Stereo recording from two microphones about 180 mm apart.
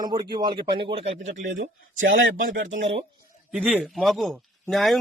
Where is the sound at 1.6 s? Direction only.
90° right.